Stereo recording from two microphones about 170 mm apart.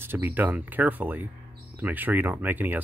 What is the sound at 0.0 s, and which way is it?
Speech, 15° right (ahead or behind).